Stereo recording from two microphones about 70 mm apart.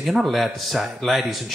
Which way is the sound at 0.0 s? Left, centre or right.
Centre.